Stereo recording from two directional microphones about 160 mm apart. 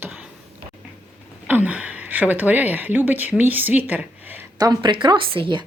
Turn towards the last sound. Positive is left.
turn(degrees=-30)  # may be behind; listen again after turning